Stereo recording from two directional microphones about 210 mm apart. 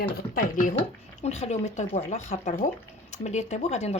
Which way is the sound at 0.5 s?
40° left (ahead or behind).